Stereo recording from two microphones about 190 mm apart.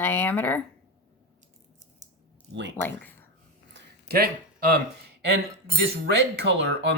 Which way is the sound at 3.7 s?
55° right (ahead or behind).